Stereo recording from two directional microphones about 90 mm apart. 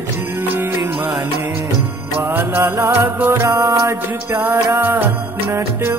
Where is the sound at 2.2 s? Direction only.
25° right (ahead or behind).